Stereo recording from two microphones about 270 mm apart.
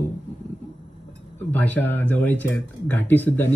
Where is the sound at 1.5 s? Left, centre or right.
Centre.